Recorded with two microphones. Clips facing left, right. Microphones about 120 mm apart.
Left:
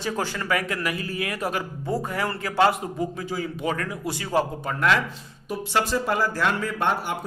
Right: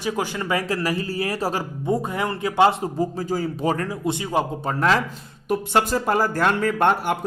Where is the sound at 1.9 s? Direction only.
20° right (ahead or behind).